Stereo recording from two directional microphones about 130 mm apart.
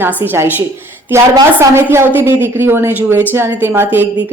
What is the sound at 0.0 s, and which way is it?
Speech, 15° right (ahead or behind).